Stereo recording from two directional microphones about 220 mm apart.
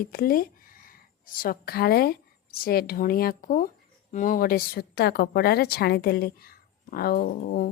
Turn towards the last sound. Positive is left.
turn(degrees=45)  # may be behind; listen again after turning